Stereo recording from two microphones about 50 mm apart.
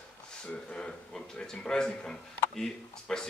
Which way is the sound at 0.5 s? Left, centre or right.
Centre.